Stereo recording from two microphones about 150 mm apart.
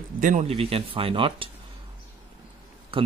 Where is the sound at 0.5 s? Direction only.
40° right (ahead or behind).